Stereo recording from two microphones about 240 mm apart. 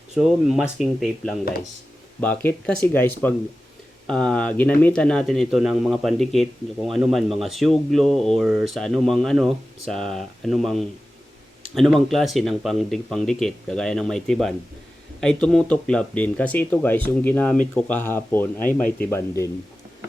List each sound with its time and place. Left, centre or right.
0.2 s speech: centre